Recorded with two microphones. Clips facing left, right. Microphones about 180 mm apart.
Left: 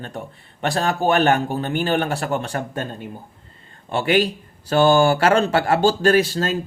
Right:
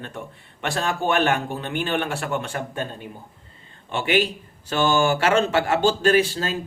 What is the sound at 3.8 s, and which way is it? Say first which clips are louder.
Speech: left 3 dB; 40° left (ahead or behind).